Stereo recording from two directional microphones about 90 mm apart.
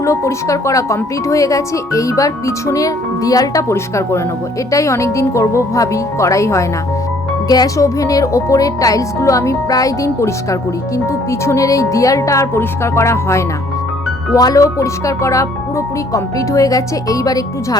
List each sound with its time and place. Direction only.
0.0 s speech: 35° left (ahead or behind)
7.4 s speech: 45° left (ahead or behind); by 13.4 s 30° left (ahead or behind)
14.3 s speech: 40° left (ahead or behind)